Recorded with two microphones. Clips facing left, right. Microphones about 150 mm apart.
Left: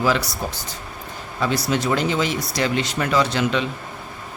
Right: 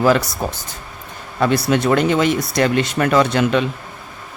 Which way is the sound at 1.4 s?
60° right (ahead or behind).